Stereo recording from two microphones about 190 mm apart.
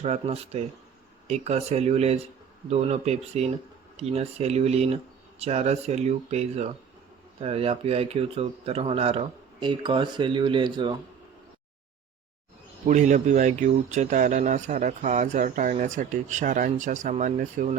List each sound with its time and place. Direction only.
0.0 s speech: 35° right (ahead or behind)
12.8 s speech: 40° right (ahead or behind)